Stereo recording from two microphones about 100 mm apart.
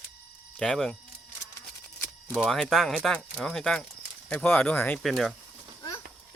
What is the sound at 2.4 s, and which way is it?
Speech, centre (ahead or behind).